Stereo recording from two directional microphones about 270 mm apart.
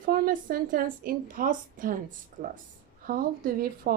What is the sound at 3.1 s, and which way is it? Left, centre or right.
Speech, right.